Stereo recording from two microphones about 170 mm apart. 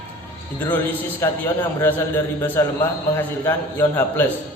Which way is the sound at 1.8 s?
10° left (ahead or behind).